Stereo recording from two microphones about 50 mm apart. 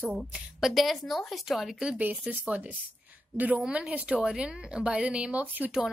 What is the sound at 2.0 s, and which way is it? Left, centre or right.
Speech, right.